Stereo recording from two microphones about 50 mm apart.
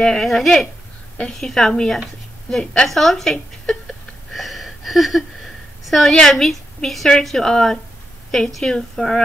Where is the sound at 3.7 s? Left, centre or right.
Centre.